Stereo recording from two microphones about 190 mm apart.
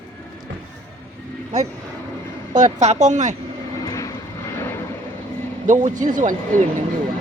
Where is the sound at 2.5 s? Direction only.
40° right (ahead or behind).